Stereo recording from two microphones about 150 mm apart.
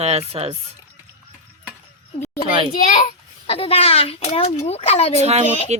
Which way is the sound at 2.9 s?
45° left (ahead or behind).